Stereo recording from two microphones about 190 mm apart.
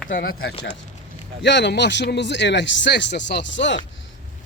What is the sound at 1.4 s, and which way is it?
Speech, 65° left (ahead or behind).